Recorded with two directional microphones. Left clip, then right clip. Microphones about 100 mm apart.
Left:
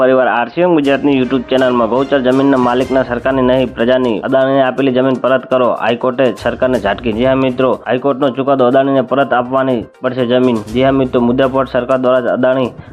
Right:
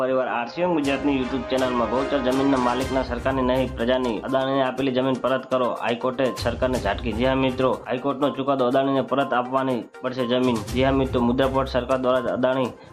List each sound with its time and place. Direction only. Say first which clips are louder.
0.0 s speech: left 12 dB; 85° left
0.7 s speech: left 11 dB; 70° left (ahead or behind)
1.5 s speech: left 10 dB; 55° left (ahead or behind); by 12.6 s 35° left (ahead or behind)